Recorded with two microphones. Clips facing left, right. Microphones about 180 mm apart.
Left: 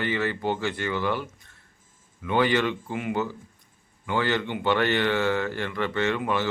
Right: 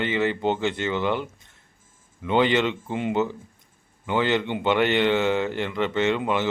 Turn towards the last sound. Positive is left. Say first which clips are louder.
# right 3 dB
turn(degrees=-20)  # may be behind; listen again after turning